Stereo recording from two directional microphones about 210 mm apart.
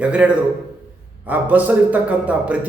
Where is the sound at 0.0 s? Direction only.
5° right (ahead or behind).